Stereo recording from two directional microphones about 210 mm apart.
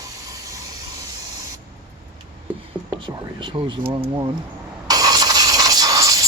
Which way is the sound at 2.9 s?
20° right (ahead or behind).